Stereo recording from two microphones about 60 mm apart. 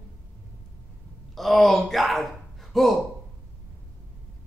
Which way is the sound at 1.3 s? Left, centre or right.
Centre.